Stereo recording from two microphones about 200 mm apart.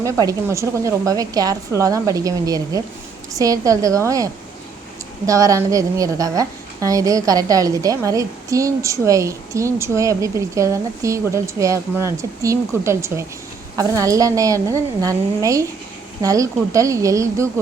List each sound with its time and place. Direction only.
0.0 s a woman's voice: 15° right (ahead or behind)